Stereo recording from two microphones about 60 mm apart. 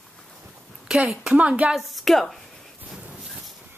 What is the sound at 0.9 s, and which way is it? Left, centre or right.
Speech, centre.